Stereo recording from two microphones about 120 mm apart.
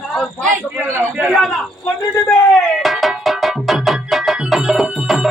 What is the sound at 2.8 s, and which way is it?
Music, centre (ahead or behind).